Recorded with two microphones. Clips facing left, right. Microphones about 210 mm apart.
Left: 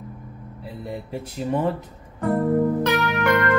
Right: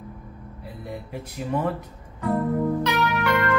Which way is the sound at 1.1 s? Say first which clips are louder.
Left 3 dB; 30° left (ahead or behind).